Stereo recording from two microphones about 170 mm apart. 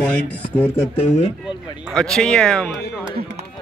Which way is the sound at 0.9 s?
35° left (ahead or behind).